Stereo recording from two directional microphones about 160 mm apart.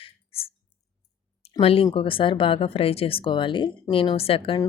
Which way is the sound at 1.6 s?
35° left (ahead or behind).